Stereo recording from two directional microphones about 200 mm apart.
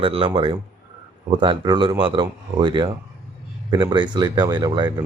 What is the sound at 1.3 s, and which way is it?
Speech, 25° right (ahead or behind).